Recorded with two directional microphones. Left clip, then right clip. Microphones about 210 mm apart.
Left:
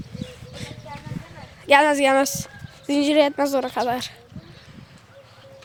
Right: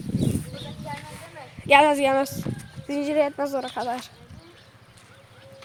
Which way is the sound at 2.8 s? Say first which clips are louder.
Left 5 dB; 40° left (ahead or behind).